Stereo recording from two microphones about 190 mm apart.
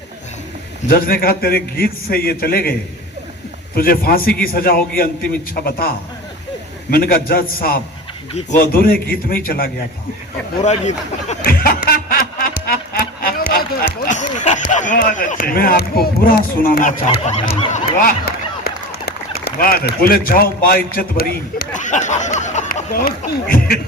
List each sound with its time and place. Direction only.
0.9 s a man's voice: 50° left (ahead or behind)
3.8 s a man's voice: 50° left (ahead or behind)
6.9 s a man's voice: 50° left (ahead or behind)
10.6 s speech: 35° left (ahead or behind)
11.4 s snicker: 50° left (ahead or behind)
12.6 s a sound: 50° left (ahead or behind)
14.9 s a man's voice: 45° left (ahead or behind)
19.0 s a sound: 55° left (ahead or behind)
20.1 s a man's voice: 50° left (ahead or behind)